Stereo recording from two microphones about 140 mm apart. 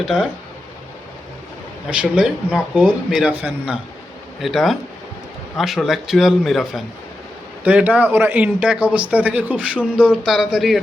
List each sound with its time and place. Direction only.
0.0 s a man's voice: 5° right (ahead or behind)
1.9 s a man's voice: 5° right (ahead or behind)